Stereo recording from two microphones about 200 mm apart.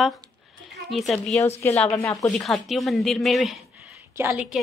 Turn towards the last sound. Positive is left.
turn(degrees=-5)  # may be behind; listen again after turning